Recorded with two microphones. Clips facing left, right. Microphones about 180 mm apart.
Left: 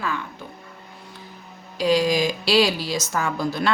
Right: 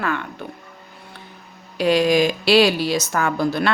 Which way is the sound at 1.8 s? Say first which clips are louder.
Right 3 dB; 60° right (ahead or behind).